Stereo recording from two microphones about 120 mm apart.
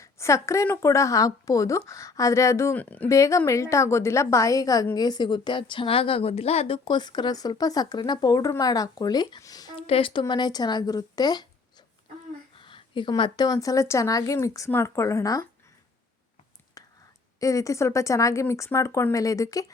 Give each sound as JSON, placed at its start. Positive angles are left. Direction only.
{"t": 0.0, "sound": "a woman's voice", "side_deg": 25}
{"t": 2.7, "sound": "speech", "side_deg": 10}
{"t": 3.1, "sound": "a woman's voice", "side_deg": 25}
{"t": 6.8, "sound": "a woman's voice", "side_deg": 40}
{"t": 9.8, "sound": "a woman's voice", "side_deg": 50}
{"t": 12.5, "sound": "a woman's voice", "side_deg": 45}
{"t": 16.8, "sound": "whispering", "side_deg": 30}
{"t": 17.4, "sound": "a woman's voice", "side_deg": 25}